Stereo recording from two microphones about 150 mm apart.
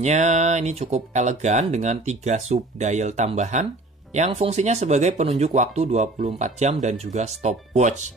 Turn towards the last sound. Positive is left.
turn(degrees=-50)  # may be behind; listen again after turning